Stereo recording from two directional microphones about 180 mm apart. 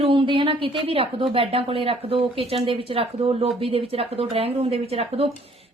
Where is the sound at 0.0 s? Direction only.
30° right (ahead or behind).